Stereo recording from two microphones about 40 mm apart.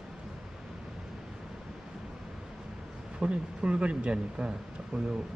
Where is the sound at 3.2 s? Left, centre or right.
Right.